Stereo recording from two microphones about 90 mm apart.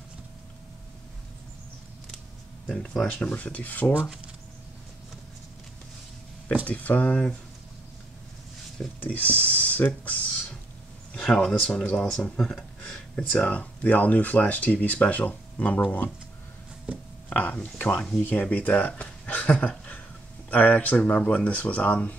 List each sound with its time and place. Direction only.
2.7 s speech: 5° left (ahead or behind)
3.9 s speech: 15° right (ahead or behind)
6.6 s speech: 15° left (ahead or behind)
9.0 s speech: 15° left (ahead or behind)
11.1 s speech: 5° left (ahead or behind)
17.3 s speech: 15° left (ahead or behind)